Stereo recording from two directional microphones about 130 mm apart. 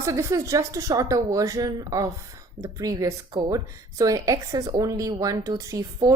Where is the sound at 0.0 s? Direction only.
25° right (ahead or behind).